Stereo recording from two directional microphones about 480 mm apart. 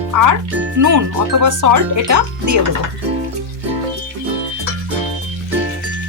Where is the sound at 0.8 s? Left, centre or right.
Right.